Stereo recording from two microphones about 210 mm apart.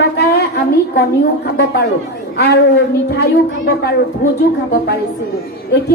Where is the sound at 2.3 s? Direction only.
50° left (ahead or behind).